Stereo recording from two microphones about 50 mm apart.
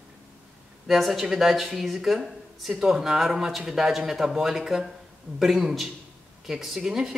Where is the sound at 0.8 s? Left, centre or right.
Centre.